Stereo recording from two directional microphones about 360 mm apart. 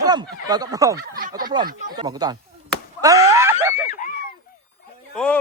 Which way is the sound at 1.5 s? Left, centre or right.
Centre.